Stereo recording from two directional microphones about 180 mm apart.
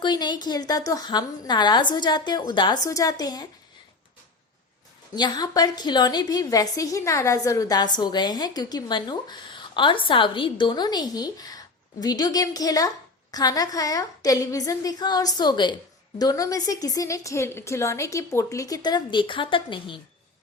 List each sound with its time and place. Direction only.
0.0 s a woman's voice: 25° left (ahead or behind)
5.1 s a woman's voice: 25° left (ahead or behind)